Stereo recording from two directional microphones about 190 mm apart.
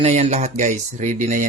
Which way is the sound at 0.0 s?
35° right (ahead or behind).